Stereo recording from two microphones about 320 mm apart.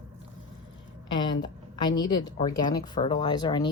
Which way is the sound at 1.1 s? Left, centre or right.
Centre.